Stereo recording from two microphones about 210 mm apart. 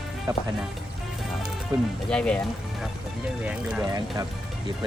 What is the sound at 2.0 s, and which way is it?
Speech, 5° left (ahead or behind).